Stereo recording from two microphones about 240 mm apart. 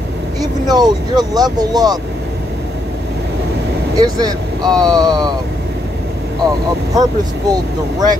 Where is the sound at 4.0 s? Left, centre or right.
Centre.